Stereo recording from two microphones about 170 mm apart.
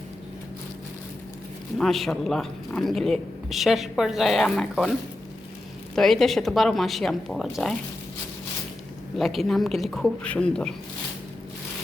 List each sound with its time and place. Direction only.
1.8 s speech: centre (ahead or behind)
6.0 s speech: centre (ahead or behind)
9.1 s speech: centre (ahead or behind)